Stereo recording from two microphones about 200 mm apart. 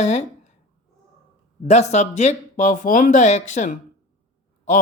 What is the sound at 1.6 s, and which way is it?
Speech, 35° left (ahead or behind).